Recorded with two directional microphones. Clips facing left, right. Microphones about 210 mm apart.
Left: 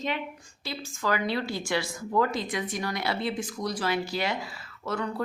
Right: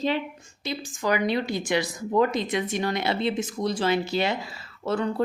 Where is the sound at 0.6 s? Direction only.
20° right (ahead or behind).